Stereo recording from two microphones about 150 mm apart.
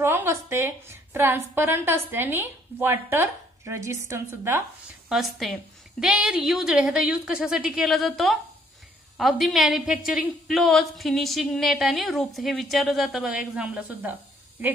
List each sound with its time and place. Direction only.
0.0 s a woman's voice: 15° right (ahead or behind)
5.1 s a woman's voice: centre (ahead or behind)